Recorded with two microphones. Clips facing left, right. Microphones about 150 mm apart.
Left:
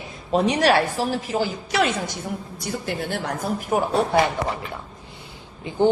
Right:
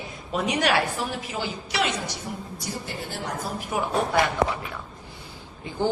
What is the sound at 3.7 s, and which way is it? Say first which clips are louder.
Speech: left 6 dB; 40° left (ahead or behind).